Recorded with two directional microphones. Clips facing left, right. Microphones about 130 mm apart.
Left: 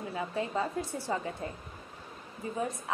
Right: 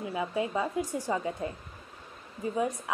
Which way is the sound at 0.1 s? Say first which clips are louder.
Right 3 dB; 15° right (ahead or behind).